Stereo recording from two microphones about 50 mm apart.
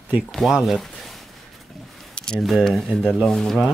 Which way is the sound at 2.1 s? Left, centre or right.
Centre.